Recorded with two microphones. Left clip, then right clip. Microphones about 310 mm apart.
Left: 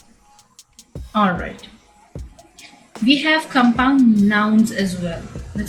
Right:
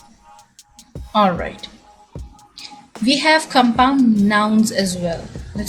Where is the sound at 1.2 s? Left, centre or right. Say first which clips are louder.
Right 1 dB; centre.